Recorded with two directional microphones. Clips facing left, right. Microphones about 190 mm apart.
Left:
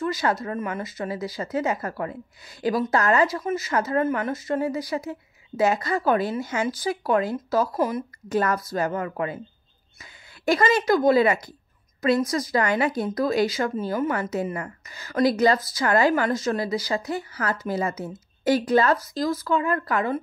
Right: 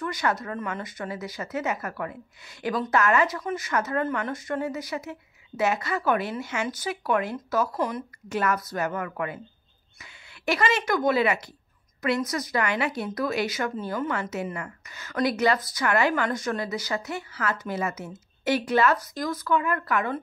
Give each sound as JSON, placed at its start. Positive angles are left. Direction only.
{"t": 0.0, "sound": "speech", "side_deg": 25}
{"t": 10.9, "sound": "speech", "side_deg": 30}
{"t": 11.1, "sound": "speech", "side_deg": 40}
{"t": 12.0, "sound": "speech", "side_deg": 30}
{"t": 13.8, "sound": "speech", "side_deg": 25}
{"t": 14.3, "sound": "speech", "side_deg": 35}